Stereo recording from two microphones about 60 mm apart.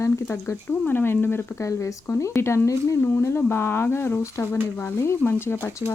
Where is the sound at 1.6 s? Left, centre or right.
Left.